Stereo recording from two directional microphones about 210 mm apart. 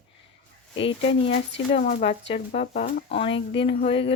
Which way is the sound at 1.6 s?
30° left (ahead or behind).